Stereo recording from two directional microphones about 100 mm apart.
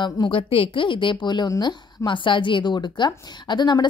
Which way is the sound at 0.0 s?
55° left (ahead or behind).